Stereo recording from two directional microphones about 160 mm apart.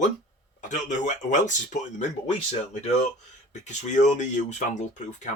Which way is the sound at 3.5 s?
45° left (ahead or behind).